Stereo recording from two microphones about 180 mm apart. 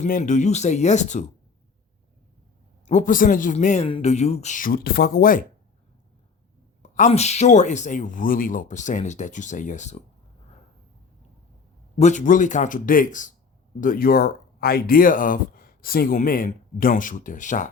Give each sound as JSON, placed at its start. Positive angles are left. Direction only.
{"t": 0.0, "sound": "speech", "side_deg": 45}
{"t": 2.8, "sound": "speech", "side_deg": 45}
{"t": 6.8, "sound": "speech", "side_deg": 40}
{"t": 11.9, "sound": "speech", "side_deg": 40}